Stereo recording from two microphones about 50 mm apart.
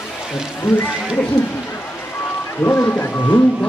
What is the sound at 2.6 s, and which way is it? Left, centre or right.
Speech, left.